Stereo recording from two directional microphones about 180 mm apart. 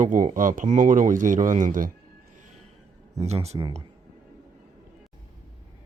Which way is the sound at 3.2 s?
35° right (ahead or behind).